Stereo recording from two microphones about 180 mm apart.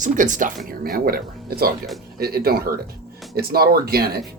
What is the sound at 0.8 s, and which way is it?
Speech, 55° right (ahead or behind).